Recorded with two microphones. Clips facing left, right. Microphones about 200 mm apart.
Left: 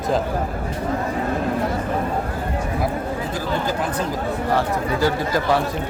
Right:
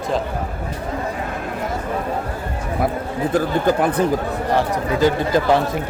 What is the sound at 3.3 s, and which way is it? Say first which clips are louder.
Speech: right 9 dB; 60° right (ahead or behind).